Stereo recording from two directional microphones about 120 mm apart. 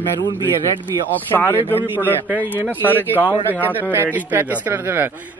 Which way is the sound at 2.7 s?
15° left (ahead or behind).